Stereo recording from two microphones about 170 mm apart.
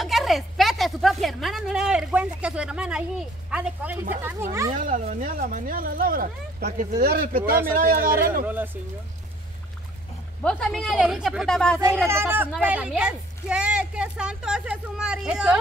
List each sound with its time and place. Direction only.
0.0 s a sound: centre (ahead or behind)
4.2 s speech: 15° right (ahead or behind)
4.7 s speech: 50° right (ahead or behind)
10.4 s speech: 5° left (ahead or behind)
12.1 s speech: 15° right (ahead or behind)